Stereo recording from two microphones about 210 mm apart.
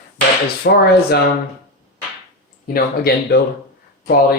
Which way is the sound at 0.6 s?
50° left (ahead or behind).